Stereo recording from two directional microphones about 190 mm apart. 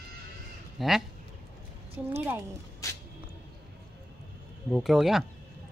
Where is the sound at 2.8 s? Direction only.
15° left (ahead or behind).